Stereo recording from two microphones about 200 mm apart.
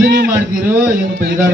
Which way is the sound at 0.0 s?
45° right (ahead or behind).